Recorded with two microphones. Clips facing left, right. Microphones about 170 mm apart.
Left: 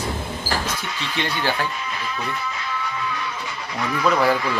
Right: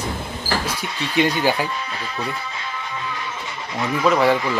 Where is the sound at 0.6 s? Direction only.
10° right (ahead or behind).